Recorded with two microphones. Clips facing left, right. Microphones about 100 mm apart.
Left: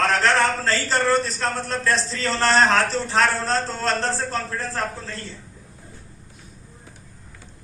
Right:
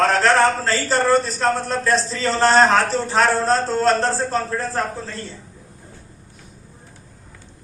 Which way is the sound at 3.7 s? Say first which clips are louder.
Right 6 dB; 40° right (ahead or behind).